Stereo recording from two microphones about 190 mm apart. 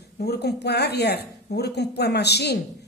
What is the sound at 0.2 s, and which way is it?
A woman's voice, 60° left (ahead or behind).